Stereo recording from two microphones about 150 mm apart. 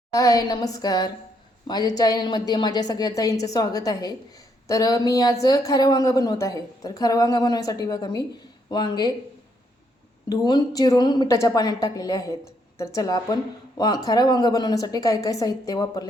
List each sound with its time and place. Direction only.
0.1 s a woman's voice: 25° left (ahead or behind)
10.2 s a woman's voice: 25° left (ahead or behind)